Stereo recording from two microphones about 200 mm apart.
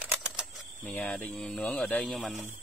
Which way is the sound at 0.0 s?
5° right (ahead or behind).